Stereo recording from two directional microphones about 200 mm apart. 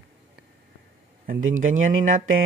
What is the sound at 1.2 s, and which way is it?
Speech, 40° right (ahead or behind).